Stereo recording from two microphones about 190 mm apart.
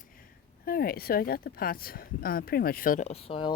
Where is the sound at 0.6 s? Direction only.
50° left (ahead or behind).